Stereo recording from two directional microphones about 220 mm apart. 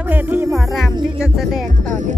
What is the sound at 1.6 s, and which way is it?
Music, 35° right (ahead or behind).